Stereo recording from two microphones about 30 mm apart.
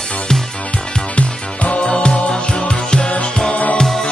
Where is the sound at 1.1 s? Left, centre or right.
Left.